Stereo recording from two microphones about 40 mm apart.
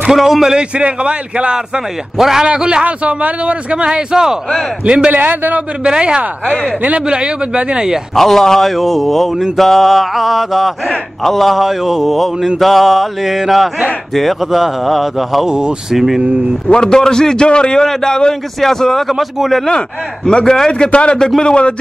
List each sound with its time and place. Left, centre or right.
0.1 s a man's voice: centre
0.6 s speech: right
2.1 s a man's voice: centre
2.4 s speech: right
5.1 s a man's voice: right
5.9 s speech: right
8.2 s speech: centre
15.4 s speech: centre
15.9 s a man's voice: centre
16.6 s a man's voice: left
19.0 s speech: centre
20.4 s a man's voice: centre
20.9 s speech: left